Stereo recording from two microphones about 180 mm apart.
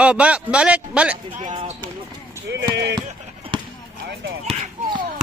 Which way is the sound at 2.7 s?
65° right (ahead or behind).